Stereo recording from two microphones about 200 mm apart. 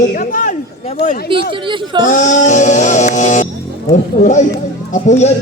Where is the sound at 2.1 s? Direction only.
40° left (ahead or behind).